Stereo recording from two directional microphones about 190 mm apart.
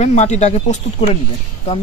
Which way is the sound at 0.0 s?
35° left (ahead or behind).